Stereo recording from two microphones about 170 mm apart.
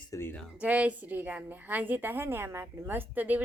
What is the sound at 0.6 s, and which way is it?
A woman's voice, 10° right (ahead or behind).